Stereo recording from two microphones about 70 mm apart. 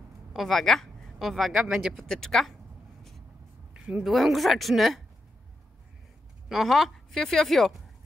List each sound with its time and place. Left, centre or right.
0.3 s speech: centre
1.7 s speech: centre
2.0 s speech: centre
3.7 s a sound: centre
4.0 s a woman's voice: centre
6.5 s a woman's voice: centre